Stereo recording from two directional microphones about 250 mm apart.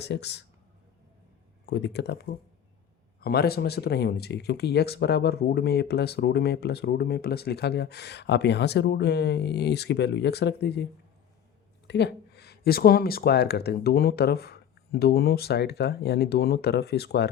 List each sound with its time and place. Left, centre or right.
0.0 s speech: left
1.6 s speech: left
11.9 s speech: left